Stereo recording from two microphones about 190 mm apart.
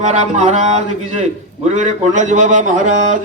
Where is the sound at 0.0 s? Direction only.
35° right (ahead or behind).